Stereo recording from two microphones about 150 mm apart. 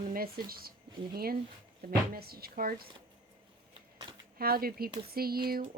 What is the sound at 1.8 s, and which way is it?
Speech, 80° right.